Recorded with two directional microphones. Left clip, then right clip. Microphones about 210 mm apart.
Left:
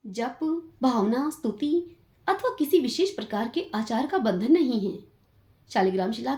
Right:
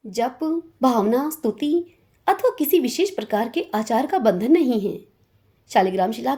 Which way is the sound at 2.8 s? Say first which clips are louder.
Right 4 dB; 40° right (ahead or behind).